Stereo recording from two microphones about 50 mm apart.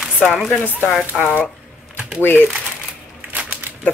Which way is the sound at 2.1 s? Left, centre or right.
Left.